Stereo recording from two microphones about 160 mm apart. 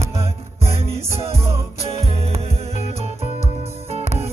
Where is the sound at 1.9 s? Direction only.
40° right (ahead or behind).